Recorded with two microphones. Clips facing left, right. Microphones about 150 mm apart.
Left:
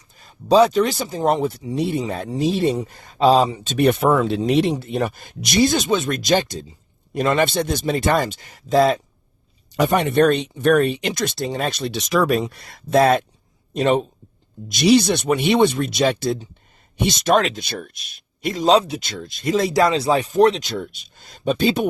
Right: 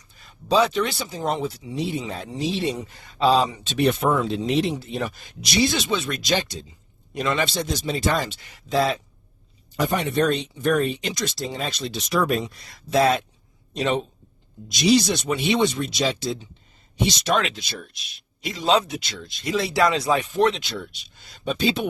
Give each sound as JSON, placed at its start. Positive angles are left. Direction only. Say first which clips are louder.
{"t": 0.2, "sound": "speech", "louder": "left 6 dB", "side_deg": 40}
{"t": 4.7, "sound": "speech", "louder": "left 5 dB", "side_deg": 55}
{"t": 9.7, "sound": "speech", "louder": "left 6 dB", "side_deg": 70}
{"t": 18.9, "sound": "speech", "louder": "left 3 dB", "side_deg": 50}